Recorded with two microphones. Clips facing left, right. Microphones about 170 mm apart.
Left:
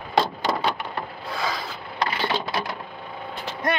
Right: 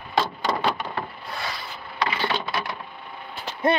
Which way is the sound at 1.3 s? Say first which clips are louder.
Left 5 dB; 90° left.